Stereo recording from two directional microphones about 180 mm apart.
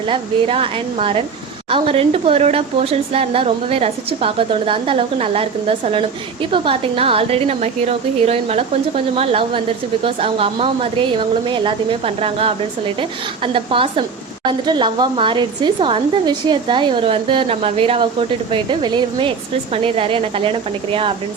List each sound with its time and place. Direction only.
0.1 s speech: 30° right (ahead or behind)